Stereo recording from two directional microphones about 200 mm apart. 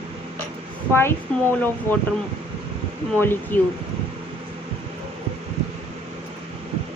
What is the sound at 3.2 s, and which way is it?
Speech, 10° left (ahead or behind).